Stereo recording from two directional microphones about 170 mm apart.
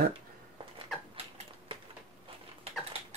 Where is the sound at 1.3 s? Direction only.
30° right (ahead or behind).